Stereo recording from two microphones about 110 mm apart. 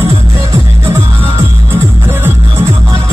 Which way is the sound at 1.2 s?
20° right (ahead or behind).